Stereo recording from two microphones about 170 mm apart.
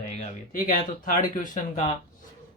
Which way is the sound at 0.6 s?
55° left (ahead or behind).